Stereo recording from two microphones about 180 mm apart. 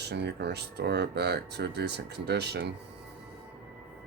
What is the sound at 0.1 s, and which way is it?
Speech, 65° right (ahead or behind).